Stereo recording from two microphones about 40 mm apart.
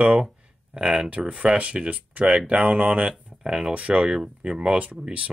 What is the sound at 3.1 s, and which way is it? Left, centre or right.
Speech, centre.